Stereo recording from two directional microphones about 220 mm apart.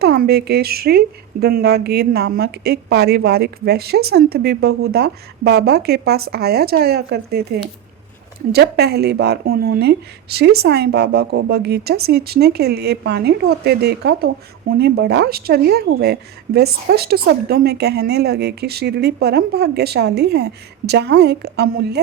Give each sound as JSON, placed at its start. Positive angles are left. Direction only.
{"t": 0.0, "sound": "a woman's voice", "side_deg": -45}